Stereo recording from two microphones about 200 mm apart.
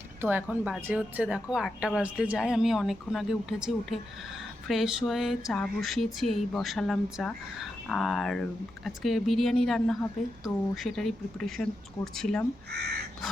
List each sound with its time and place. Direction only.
0.2 s speech: 10° right (ahead or behind)
12.7 s crow: 55° right (ahead or behind)